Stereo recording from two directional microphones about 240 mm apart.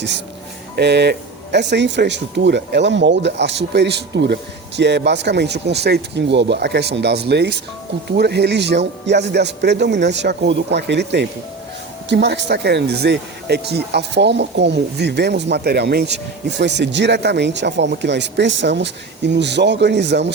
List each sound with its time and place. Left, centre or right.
0.8 s speech: right